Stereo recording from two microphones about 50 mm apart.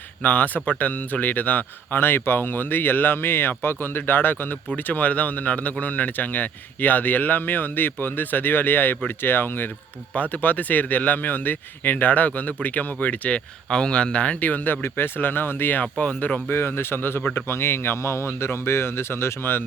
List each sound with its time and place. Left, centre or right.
0.2 s a man's voice: left
10.2 s a man's voice: left
13.7 s a man's voice: centre; by 15.8 s left
15.8 s speech: left
16.5 s speech: left